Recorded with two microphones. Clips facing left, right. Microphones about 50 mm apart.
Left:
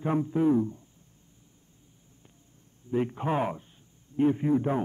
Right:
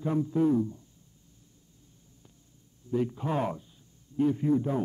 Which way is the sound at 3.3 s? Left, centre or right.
Left.